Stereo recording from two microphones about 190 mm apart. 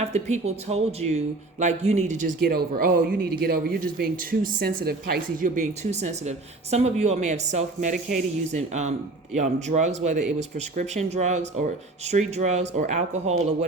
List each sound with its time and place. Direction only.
0.1 s speech: 35° right (ahead or behind)